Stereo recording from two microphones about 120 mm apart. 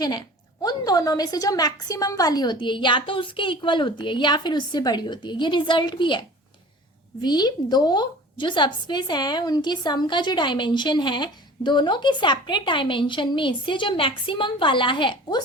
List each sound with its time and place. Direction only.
0.0 s a woman's voice: 35° left (ahead or behind)